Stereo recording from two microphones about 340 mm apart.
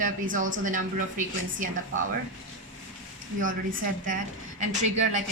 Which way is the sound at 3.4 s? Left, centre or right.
Right.